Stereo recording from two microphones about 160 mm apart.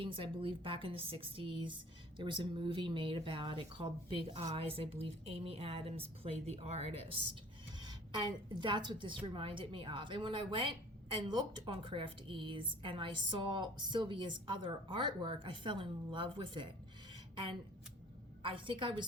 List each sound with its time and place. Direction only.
0.0 s a woman's voice: 35° right (ahead or behind)
7.8 s a woman's voice: 25° right (ahead or behind)
18.4 s a woman's voice: 30° right (ahead or behind)